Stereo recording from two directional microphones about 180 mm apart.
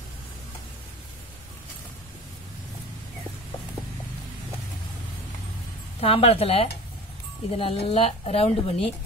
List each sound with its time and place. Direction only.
5.9 s speech: 35° left (ahead or behind)